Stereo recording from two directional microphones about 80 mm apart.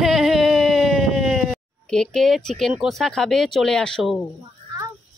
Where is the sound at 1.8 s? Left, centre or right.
Centre.